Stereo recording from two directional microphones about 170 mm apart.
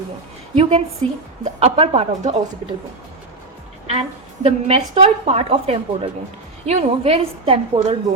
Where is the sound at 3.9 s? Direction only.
35° right (ahead or behind).